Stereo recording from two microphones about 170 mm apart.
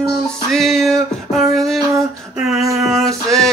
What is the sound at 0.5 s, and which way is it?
Music, centre (ahead or behind).